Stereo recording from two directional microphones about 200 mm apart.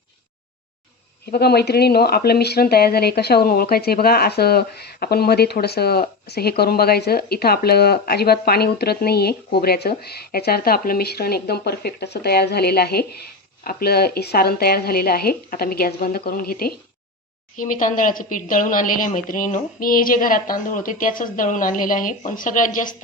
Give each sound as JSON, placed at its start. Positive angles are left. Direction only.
{"t": 1.3, "sound": "speech", "side_deg": 55}